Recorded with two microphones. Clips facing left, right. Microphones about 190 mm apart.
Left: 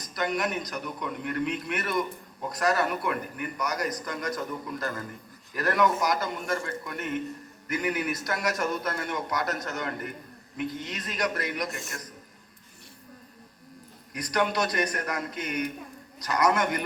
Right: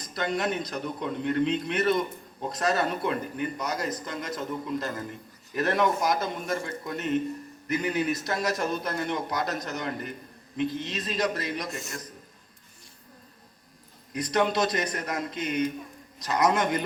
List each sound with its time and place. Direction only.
0.0 s a man's voice: 25° right (ahead or behind)
14.1 s a man's voice: 25° right (ahead or behind)